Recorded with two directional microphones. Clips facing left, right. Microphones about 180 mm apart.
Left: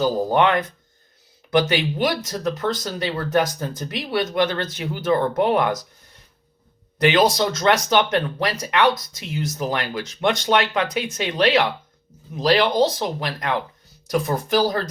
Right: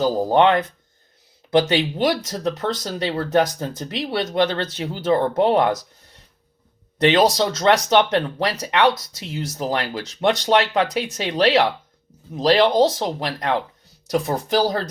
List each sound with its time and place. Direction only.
0.3 s speech: 25° right (ahead or behind)
7.0 s speech: 35° right (ahead or behind)